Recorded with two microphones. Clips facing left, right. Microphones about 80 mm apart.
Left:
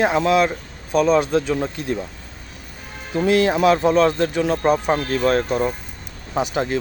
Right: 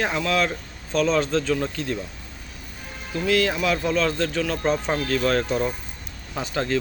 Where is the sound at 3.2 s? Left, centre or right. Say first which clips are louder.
Left 6 dB; left.